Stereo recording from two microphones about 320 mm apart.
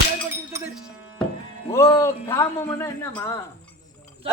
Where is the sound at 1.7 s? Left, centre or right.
Centre.